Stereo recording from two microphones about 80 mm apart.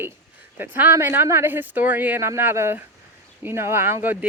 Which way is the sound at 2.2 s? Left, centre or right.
Right.